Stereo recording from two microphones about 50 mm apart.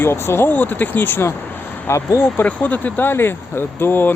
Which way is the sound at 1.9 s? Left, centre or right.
Left.